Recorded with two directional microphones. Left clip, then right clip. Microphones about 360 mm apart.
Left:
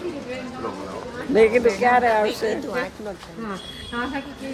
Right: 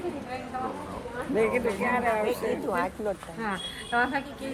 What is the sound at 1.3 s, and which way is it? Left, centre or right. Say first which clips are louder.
Speech: left 10 dB; centre.